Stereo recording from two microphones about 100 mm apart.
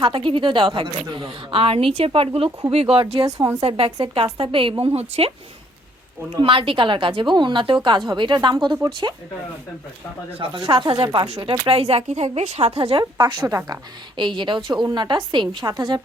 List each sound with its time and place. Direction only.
0.0 s speech: 55° right (ahead or behind)
4.0 s speech: 60° right (ahead or behind)
4.8 s a woman's voice: 80° right
6.3 s a woman's voice: 60° right (ahead or behind)
10.3 s speech: 55° right (ahead or behind)
11.7 s a woman's voice: 90° right; by 16.0 s 50° right (ahead or behind)